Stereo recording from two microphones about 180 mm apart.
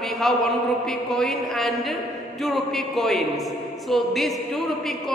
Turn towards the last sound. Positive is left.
turn(degrees=0)  # may be behind; listen again after turning